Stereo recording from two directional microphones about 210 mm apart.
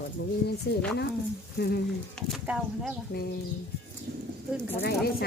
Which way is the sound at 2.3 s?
Centre (ahead or behind).